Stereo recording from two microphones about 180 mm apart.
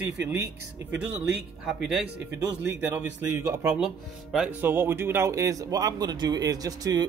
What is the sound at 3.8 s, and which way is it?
Speech, 5° right (ahead or behind).